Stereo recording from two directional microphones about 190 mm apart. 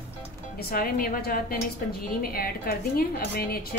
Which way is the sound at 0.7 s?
50° left (ahead or behind).